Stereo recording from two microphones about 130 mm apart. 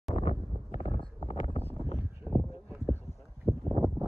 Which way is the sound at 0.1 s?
55° left (ahead or behind).